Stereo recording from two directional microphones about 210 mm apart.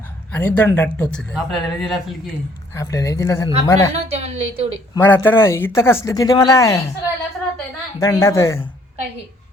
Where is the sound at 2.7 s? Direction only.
15° left (ahead or behind).